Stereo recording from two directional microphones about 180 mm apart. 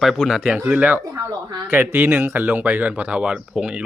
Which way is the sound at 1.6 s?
10° right (ahead or behind).